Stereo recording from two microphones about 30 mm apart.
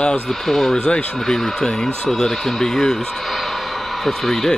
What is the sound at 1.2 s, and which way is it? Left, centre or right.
Speech, centre.